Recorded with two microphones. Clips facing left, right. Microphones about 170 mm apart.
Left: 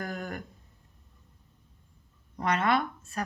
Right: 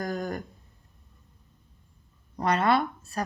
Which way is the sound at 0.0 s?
35° right (ahead or behind).